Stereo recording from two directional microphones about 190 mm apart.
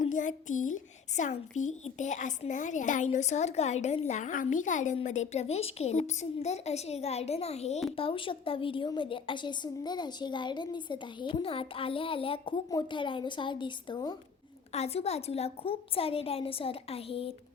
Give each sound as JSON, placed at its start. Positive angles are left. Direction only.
{"t": 0.0, "sound": "a woman's voice", "side_deg": 40}